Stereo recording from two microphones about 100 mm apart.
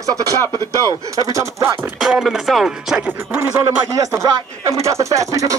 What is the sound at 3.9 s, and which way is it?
Speech, 35° right (ahead or behind).